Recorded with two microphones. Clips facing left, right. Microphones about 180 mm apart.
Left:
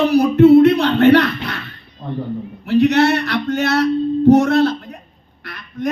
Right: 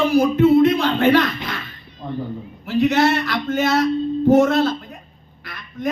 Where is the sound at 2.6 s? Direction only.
75° left (ahead or behind).